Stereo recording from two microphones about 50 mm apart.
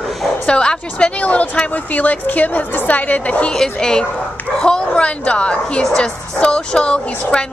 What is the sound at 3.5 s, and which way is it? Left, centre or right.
A woman's voice, centre.